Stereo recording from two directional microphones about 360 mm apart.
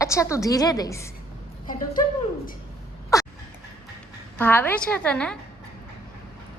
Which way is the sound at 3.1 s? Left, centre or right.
Centre.